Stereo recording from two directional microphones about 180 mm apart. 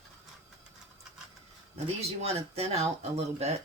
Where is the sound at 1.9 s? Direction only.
35° right (ahead or behind).